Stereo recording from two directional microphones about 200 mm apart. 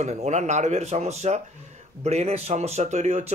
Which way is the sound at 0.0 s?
35° right (ahead or behind).